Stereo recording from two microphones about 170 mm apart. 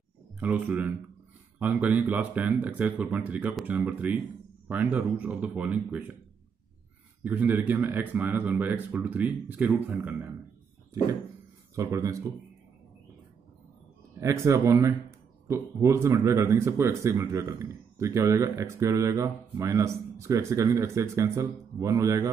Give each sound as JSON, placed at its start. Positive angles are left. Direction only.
{"t": 0.4, "sound": "speech", "side_deg": -10}
{"t": 7.2, "sound": "speech", "side_deg": -10}
{"t": 11.7, "sound": "speech", "side_deg": -20}
{"t": 14.2, "sound": "speech", "side_deg": -15}